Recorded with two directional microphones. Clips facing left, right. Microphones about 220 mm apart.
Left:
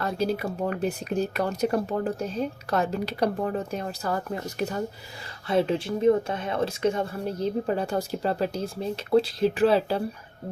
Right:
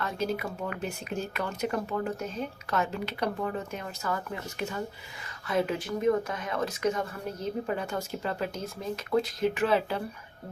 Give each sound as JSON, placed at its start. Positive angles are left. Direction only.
{"t": 0.0, "sound": "speech", "side_deg": 35}